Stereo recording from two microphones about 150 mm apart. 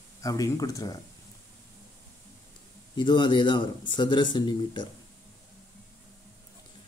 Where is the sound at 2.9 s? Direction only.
30° left (ahead or behind).